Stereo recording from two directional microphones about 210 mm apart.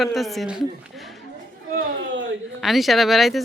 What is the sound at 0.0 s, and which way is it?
Speech, centre (ahead or behind).